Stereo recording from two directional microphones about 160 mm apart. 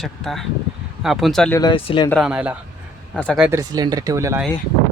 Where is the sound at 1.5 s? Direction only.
20° left (ahead or behind).